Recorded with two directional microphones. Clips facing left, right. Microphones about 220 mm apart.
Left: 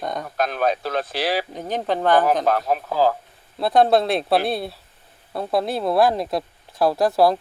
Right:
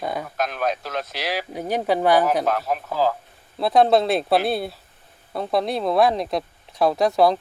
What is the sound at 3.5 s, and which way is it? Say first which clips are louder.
Speech: even; centre (ahead or behind).